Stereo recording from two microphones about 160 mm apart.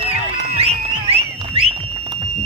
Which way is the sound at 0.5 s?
40° right (ahead or behind).